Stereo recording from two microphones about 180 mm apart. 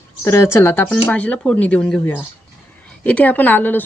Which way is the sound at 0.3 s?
15° left (ahead or behind).